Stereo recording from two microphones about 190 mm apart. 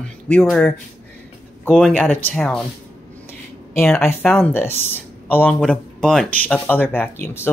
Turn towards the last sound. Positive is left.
turn(degrees=10)  # may be behind; listen again after turning